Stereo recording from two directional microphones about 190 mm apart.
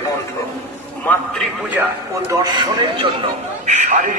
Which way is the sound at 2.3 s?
20° right (ahead or behind).